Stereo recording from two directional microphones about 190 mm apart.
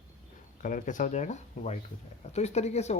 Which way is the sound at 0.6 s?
45° left (ahead or behind).